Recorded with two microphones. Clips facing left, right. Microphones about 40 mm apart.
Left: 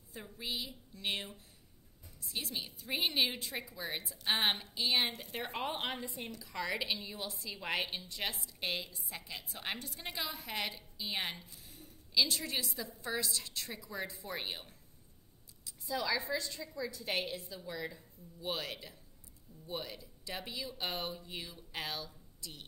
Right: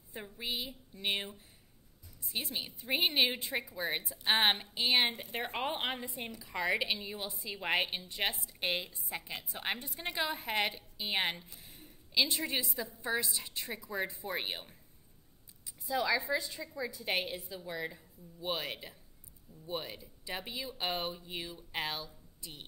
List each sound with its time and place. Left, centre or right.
0.1 s a woman's voice: right